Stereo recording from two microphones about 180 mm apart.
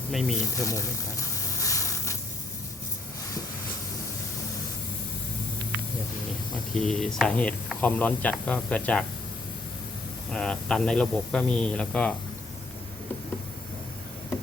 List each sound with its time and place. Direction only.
0.1 s speech: centre (ahead or behind)
0.5 s a sound: 15° left (ahead or behind)
6.7 s speech: 5° left (ahead or behind)
10.3 s speech: 5° left (ahead or behind)